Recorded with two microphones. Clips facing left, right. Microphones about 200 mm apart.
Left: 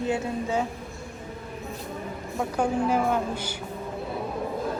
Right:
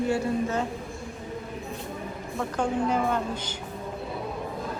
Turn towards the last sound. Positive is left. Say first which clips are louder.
# left 2 dB
turn(degrees=10)  # may be behind; listen again after turning